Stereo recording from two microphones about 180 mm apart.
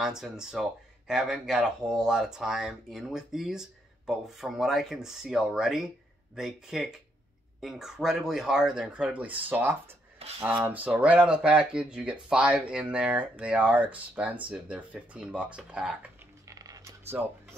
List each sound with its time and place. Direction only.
0.0 s speech: 5° right (ahead or behind)
16.4 s a sound: 20° right (ahead or behind)
17.2 s speech: centre (ahead or behind)